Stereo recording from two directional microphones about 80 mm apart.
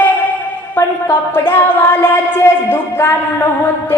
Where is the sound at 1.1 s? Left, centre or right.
Left.